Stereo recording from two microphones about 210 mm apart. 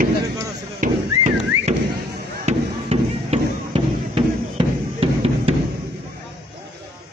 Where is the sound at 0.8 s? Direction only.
35° right (ahead or behind).